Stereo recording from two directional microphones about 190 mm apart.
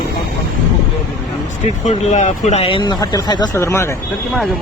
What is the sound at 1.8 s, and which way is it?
Speech, 35° left (ahead or behind).